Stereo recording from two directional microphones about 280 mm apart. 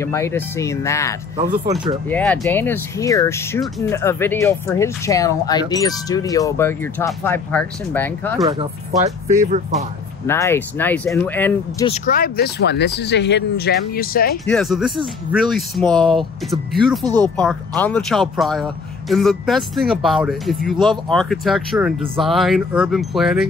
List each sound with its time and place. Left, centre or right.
0.0 s speech: centre
10.2 s speech: centre
11.8 s speech: left
14.4 s speech: centre